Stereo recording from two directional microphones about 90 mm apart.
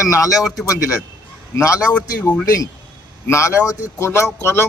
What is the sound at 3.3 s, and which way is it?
Speech, 35° left (ahead or behind).